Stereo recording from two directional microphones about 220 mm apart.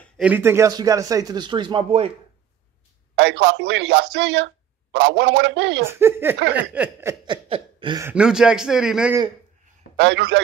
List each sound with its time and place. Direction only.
0.2 s speech: 10° right (ahead or behind); by 2.1 s 25° right (ahead or behind)
3.2 s a man's voice: 55° right (ahead or behind)
5.9 s speech: 10° right (ahead or behind)
7.4 s a sound: 25° right (ahead or behind)
8.0 s speech: 5° right (ahead or behind)
9.9 s speech: 55° right (ahead or behind)